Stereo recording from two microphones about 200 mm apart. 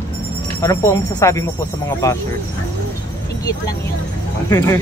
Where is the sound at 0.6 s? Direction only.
15° left (ahead or behind).